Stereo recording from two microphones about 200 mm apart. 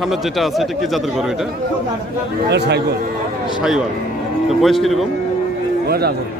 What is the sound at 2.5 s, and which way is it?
Speech, 55° right (ahead or behind).